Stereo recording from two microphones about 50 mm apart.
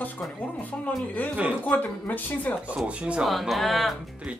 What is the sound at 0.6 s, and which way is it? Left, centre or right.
Speech, left.